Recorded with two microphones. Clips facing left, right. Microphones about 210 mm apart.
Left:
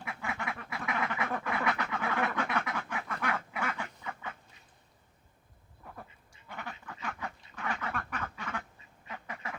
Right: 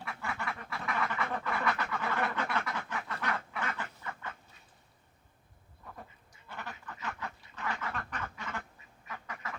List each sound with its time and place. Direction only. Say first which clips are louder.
0.0 s duck: left 1 dB; 15° left (ahead or behind)
6.5 s duck: left 1 dB; 15° left (ahead or behind)
9.0 s duck: left 1 dB; 25° left (ahead or behind)